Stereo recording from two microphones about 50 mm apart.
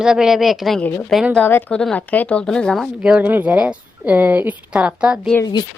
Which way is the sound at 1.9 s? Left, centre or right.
Left.